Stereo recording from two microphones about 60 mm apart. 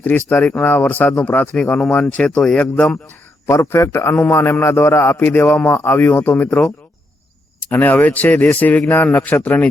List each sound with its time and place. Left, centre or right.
0.0 s speech: left
3.4 s a man's voice: left
7.7 s speech: left